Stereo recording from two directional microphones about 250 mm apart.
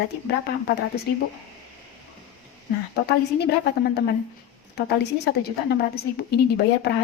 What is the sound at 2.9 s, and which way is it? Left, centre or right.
A woman's voice, left.